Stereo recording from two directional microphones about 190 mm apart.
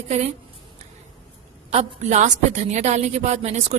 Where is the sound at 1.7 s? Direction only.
35° right (ahead or behind).